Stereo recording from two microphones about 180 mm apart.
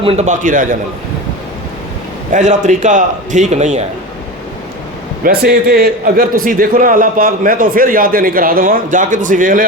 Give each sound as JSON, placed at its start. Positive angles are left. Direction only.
{"t": 0.0, "sound": "a man's voice", "side_deg": -35}
{"t": 2.3, "sound": "a man's voice", "side_deg": -40}
{"t": 5.2, "sound": "a man's voice", "side_deg": -60}